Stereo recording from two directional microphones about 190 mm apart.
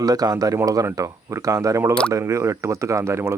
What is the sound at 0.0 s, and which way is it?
Speech, 20° right (ahead or behind).